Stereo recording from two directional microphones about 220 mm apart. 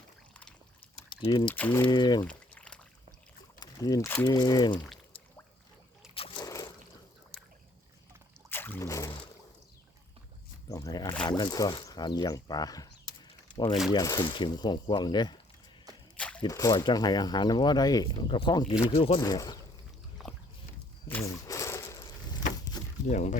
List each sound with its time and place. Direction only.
1.1 s speech: 20° left (ahead or behind)
1.5 s speech: 5° left (ahead or behind)
1.9 s speech: 20° left (ahead or behind)
2.2 s pour: 5° left (ahead or behind)
3.6 s speech: 15° left (ahead or behind)
4.8 s a sound: 5° left (ahead or behind)
6.1 s splash: 20° left (ahead or behind)
8.4 s a sound: 10° left (ahead or behind)
10.7 s speech: 15° left (ahead or behind)
16.1 s a sound: 5° left (ahead or behind)
16.4 s speech: 15° left (ahead or behind)
20.2 s dog: centre (ahead or behind)
21.1 s a sound: 15° left (ahead or behind)
23.0 s speech: 30° left (ahead or behind)